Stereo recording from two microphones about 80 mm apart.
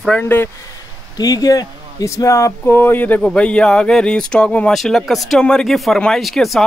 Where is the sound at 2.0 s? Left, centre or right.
Left.